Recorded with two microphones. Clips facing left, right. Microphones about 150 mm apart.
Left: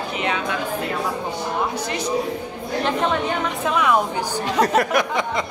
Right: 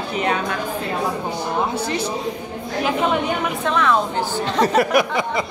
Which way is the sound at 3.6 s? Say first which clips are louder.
Even; 10° left (ahead or behind).